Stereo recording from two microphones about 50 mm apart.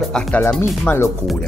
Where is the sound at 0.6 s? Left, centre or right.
Left.